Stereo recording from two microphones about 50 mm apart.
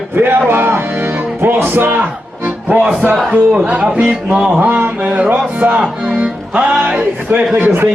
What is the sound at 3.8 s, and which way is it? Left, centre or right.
Music, centre.